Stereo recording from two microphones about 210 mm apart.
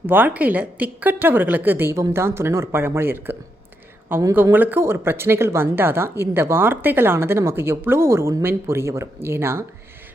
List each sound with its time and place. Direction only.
0.0 s speech: 10° right (ahead or behind)